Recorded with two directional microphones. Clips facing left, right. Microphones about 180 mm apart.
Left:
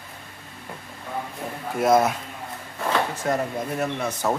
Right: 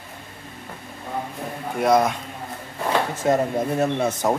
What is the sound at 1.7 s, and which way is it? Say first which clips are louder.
Speech: even; centre (ahead or behind).